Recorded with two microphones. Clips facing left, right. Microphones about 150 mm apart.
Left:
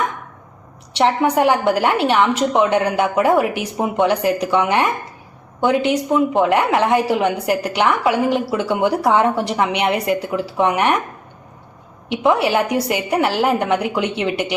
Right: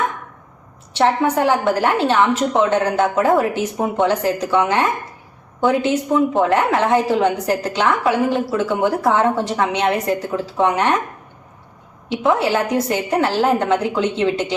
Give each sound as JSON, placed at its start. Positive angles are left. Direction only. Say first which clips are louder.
{"t": 0.9, "sound": "a woman's voice", "louder": "left 1 dB", "side_deg": 15}
{"t": 12.0, "sound": "a woman's voice", "louder": "left 1 dB", "side_deg": 20}